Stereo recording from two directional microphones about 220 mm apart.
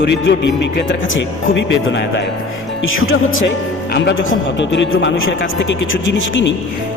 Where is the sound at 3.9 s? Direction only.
50° left (ahead or behind).